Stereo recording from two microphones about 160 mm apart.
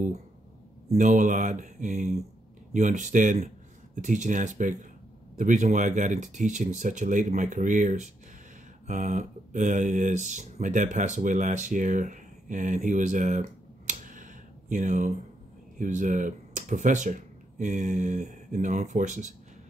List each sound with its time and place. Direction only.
0.9 s speech: 50° right (ahead or behind)